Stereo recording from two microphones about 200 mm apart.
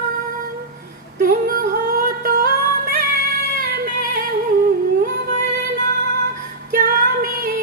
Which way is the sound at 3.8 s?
50° right (ahead or behind).